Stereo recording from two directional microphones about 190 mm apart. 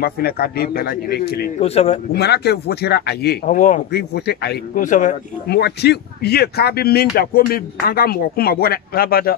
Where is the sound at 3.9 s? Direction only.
60° left (ahead or behind).